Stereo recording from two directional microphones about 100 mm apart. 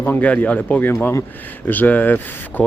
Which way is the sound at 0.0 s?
15° left (ahead or behind).